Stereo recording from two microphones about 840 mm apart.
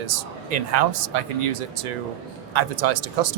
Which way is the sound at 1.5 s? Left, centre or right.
Right.